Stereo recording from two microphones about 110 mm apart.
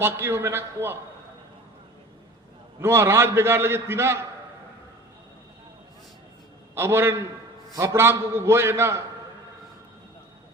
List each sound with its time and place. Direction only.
0.0 s a man's voice: 20° right (ahead or behind)
2.8 s a man's voice: 20° right (ahead or behind)
6.7 s a man's voice: 20° right (ahead or behind)